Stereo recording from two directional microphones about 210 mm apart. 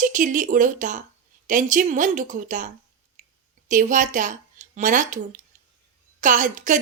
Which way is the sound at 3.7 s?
40° right (ahead or behind).